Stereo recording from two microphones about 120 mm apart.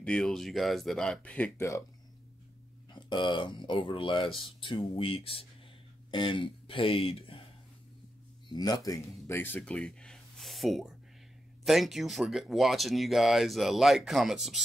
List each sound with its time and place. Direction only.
0.0 s speech: 5° left (ahead or behind)
1.6 s speech: 25° left (ahead or behind)
2.9 s speech: 40° left (ahead or behind)
8.5 s speech: 35° left (ahead or behind)
9.3 s speech: 15° left (ahead or behind); by 14.6 s centre (ahead or behind)